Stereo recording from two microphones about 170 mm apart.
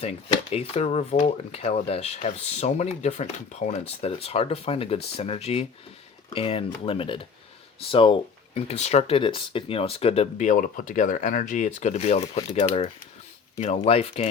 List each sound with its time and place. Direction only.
0.0 s speech: 35° left (ahead or behind)